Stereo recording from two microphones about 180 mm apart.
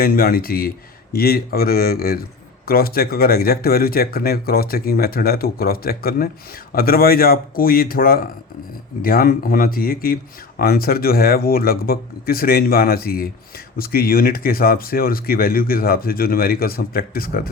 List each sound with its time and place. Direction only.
0.0 s speech: 55° left (ahead or behind)